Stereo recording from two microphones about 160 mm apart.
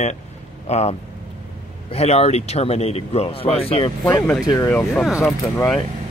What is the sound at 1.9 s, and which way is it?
Speech, 40° left (ahead or behind).